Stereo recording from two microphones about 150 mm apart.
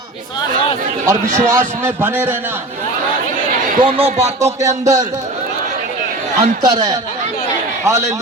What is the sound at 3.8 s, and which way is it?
Speech, 40° right (ahead or behind).